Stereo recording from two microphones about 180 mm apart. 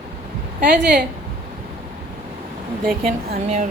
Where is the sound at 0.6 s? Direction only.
70° right (ahead or behind).